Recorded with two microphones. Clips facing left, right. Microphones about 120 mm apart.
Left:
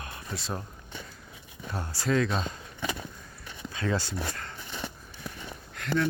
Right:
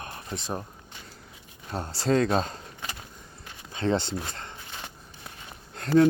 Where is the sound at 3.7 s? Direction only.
25° right (ahead or behind).